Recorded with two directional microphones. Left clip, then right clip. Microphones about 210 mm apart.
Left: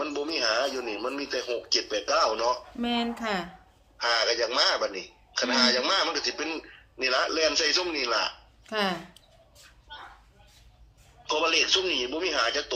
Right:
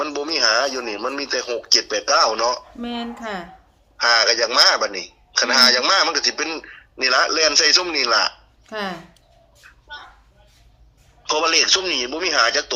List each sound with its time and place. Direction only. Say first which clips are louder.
0.0 s a man's voice: right 8 dB; 55° right (ahead or behind)
2.7 s speech: even; centre (ahead or behind)
3.9 s a man's voice: right 9 dB; 50° right (ahead or behind)
8.6 s speech: right 1 dB; centre (ahead or behind)
11.2 s a man's voice: right 7 dB; 50° right (ahead or behind)